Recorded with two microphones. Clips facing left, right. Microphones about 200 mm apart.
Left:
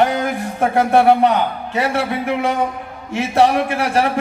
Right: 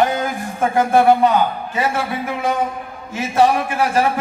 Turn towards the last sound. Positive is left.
turn(degrees=70)  # may be behind; listen again after turning